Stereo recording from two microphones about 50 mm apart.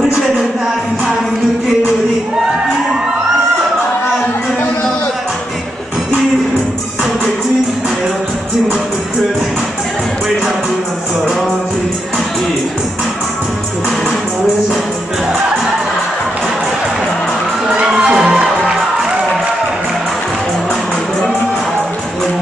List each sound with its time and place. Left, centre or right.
17.7 s music: right